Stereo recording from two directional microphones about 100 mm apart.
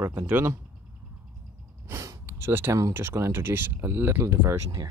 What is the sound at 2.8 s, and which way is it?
Speech, 25° right (ahead or behind).